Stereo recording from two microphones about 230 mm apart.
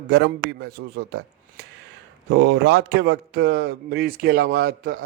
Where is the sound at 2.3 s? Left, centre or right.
Right.